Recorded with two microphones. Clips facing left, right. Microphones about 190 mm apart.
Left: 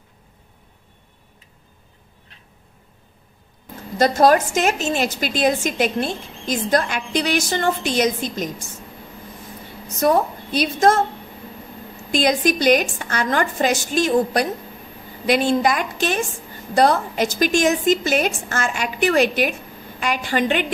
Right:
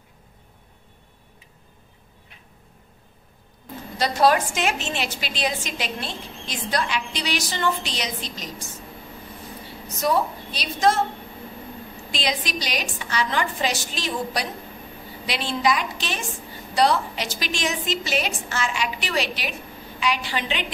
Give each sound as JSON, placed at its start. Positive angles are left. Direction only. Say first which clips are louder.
{"t": 4.0, "sound": "a woman's voice", "louder": "left 5 dB", "side_deg": 45}
{"t": 9.9, "sound": "a woman's voice", "louder": "left 5 dB", "side_deg": 50}
{"t": 12.1, "sound": "a woman's voice", "louder": "left 10 dB", "side_deg": 50}